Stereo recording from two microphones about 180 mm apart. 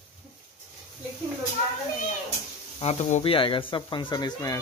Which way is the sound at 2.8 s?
35° left (ahead or behind).